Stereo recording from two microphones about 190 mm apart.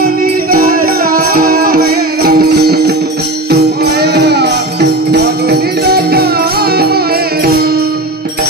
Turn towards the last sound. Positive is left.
turn(degrees=-55)  # may be behind; listen again after turning